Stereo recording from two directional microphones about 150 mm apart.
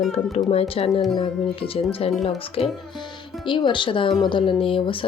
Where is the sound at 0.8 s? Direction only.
40° left (ahead or behind).